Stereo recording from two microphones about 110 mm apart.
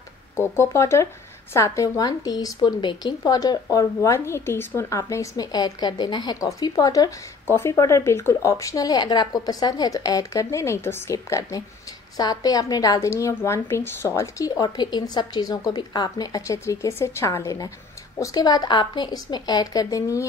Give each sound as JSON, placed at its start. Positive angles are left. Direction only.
{"t": 0.4, "sound": "a woman's voice", "side_deg": 25}